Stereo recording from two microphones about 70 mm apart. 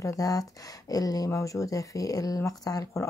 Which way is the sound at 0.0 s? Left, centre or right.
Left.